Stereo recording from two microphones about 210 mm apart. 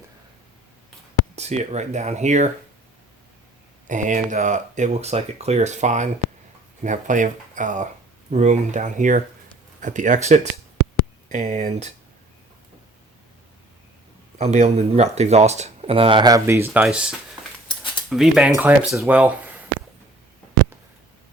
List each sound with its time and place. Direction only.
1.4 s speech: 30° right (ahead or behind)
3.8 s speech: 35° right (ahead or behind)
14.3 s speech: 30° right (ahead or behind); by 19.3 s 5° right (ahead or behind)